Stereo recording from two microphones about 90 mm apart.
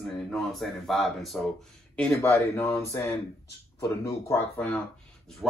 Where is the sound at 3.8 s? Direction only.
35° left (ahead or behind).